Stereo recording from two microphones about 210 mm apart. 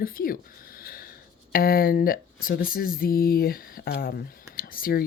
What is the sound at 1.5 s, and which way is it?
Speech, 45° left (ahead or behind).